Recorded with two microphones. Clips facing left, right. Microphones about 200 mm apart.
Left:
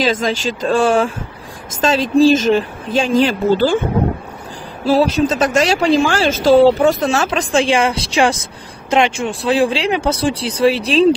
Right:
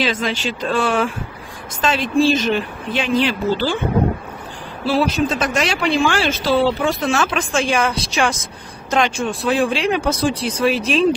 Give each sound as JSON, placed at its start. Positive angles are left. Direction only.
{"t": 0.0, "sound": "speech", "side_deg": 45}
{"t": 4.8, "sound": "speech", "side_deg": 40}